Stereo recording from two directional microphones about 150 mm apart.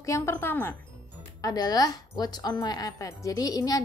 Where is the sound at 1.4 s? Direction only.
25° left (ahead or behind).